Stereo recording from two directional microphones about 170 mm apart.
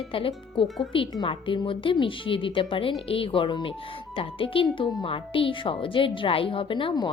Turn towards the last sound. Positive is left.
turn(degrees=30)  # may be behind; listen again after turning